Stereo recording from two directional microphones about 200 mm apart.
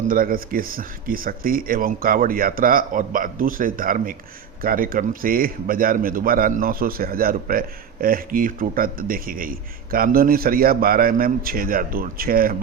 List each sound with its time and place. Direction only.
0.1 s a man's voice: 45° right (ahead or behind)